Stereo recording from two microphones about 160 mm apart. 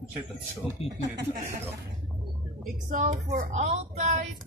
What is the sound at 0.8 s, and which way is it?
Speech, 35° left (ahead or behind).